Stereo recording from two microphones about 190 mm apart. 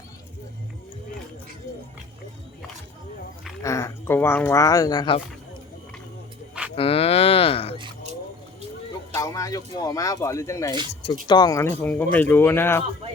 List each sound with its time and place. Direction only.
3.6 s speech: 15° left (ahead or behind)
6.7 s speech: 30° left (ahead or behind)
9.1 s speech: 15° left (ahead or behind)